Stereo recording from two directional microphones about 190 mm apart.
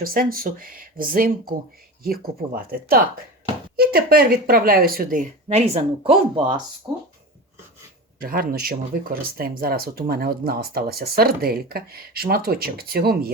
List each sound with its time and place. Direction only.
0.0 s speech: 50° right (ahead or behind); by 6.4 s 30° right (ahead or behind)
6.8 s speech: 15° right (ahead or behind)
8.2 s speech: 50° right (ahead or behind)